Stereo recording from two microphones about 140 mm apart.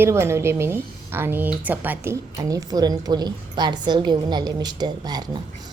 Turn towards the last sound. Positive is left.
turn(degrees=-30)  # may be behind; listen again after turning